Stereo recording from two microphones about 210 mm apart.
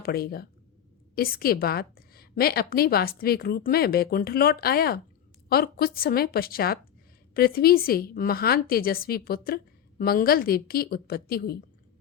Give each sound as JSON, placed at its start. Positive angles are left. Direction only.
{"t": 0.0, "sound": "a woman's voice", "side_deg": 45}